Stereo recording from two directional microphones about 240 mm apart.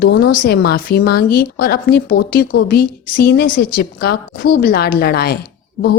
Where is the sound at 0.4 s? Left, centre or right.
Left.